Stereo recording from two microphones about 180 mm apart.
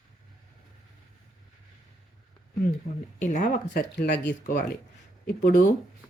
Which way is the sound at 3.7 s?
65° left (ahead or behind).